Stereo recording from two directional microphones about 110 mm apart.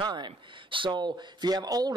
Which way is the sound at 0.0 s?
45° right (ahead or behind).